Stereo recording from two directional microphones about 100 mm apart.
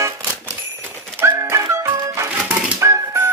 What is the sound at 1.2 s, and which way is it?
Music, 30° right (ahead or behind).